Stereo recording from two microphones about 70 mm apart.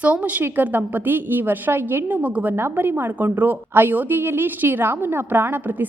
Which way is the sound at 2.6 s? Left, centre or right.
Right.